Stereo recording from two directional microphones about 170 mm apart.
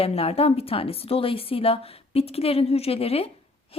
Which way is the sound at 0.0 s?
35° left (ahead or behind).